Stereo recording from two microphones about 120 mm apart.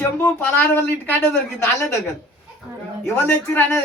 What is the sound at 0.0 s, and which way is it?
Speech, 20° left (ahead or behind).